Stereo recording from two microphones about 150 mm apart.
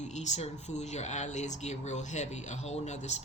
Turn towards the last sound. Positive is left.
turn(degrees=50)  # may be behind; listen again after turning